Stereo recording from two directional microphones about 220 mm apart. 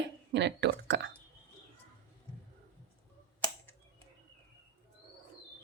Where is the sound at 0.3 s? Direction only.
50° right (ahead or behind).